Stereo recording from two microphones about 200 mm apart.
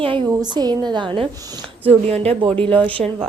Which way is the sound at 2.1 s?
30° right (ahead or behind).